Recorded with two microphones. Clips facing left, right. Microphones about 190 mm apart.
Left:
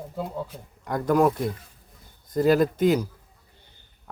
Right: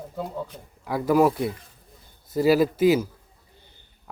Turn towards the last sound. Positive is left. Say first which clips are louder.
# right 1 dB
turn(degrees=-5)  # may be behind; listen again after turning